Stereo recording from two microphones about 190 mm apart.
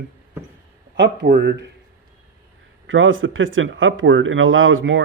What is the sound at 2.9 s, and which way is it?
Speech, 90° right.